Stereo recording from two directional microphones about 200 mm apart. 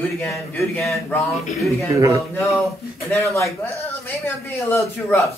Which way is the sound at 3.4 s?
10° left (ahead or behind).